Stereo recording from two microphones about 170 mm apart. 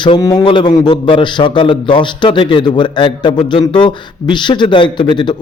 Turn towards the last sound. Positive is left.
turn(degrees=30)  # may be behind; listen again after turning